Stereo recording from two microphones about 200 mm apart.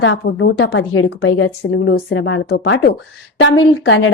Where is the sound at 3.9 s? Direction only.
75° left (ahead or behind).